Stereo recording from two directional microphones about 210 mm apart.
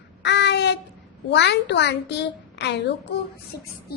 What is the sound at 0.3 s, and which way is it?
Child singing, 55° left (ahead or behind).